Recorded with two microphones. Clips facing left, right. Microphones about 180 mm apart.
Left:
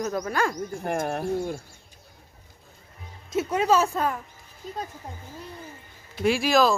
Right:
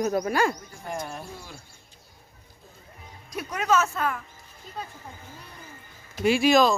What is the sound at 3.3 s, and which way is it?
Speech, 25° left (ahead or behind).